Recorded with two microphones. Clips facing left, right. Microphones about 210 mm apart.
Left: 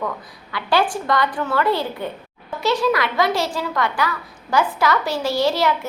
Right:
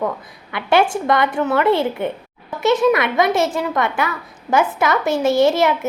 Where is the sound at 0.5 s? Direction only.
25° right (ahead or behind).